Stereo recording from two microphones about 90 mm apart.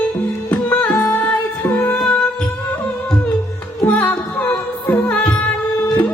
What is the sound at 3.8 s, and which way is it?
Music, 20° left (ahead or behind).